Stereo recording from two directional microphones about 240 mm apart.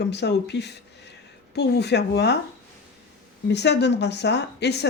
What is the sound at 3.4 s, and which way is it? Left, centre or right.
Speech, left.